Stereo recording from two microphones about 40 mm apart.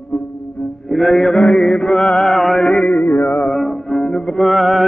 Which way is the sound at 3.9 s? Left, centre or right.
Centre.